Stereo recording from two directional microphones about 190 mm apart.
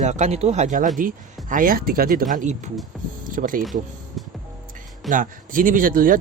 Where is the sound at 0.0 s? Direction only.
35° right (ahead or behind).